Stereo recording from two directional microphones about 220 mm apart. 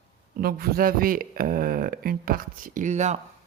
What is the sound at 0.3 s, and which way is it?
Speech, 45° right (ahead or behind).